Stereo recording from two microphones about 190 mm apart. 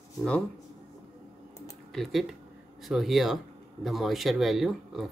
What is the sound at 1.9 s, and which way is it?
Speech, centre (ahead or behind).